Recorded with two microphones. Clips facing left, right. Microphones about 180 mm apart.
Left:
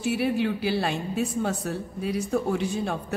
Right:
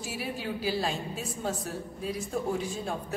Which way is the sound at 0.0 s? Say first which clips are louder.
Left 11 dB; 65° left (ahead or behind).